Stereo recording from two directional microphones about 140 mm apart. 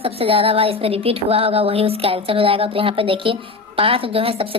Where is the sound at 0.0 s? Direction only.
40° right (ahead or behind).